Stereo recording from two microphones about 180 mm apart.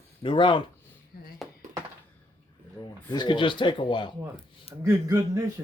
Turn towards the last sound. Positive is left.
turn(degrees=-20)  # may be behind; listen again after turning